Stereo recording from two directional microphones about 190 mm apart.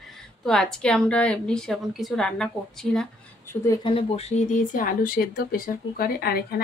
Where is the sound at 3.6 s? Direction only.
20° left (ahead or behind); by 6.4 s 55° left (ahead or behind).